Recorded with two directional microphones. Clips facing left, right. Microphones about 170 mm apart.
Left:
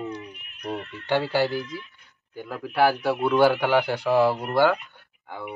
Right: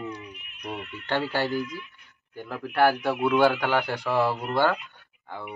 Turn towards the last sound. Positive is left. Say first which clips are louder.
# left 3 dB
turn(degrees=10)  # may be behind; listen again after turning